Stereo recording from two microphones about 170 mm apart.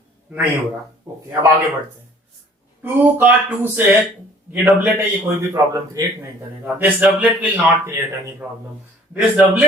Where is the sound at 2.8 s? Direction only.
10° right (ahead or behind).